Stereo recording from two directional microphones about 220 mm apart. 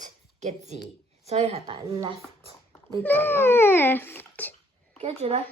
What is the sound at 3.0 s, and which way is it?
A child's voice, 10° left (ahead or behind).